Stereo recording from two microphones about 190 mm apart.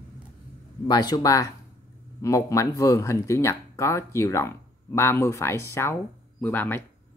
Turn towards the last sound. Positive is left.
turn(degrees=10)  # may be behind; listen again after turning